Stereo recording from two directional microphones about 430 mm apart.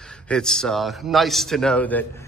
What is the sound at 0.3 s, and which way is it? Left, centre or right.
Speech, centre.